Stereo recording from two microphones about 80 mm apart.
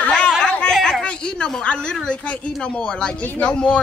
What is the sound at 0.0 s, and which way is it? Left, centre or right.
Chatter, centre.